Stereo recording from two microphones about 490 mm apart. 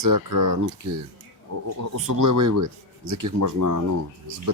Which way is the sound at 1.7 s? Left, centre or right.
Right.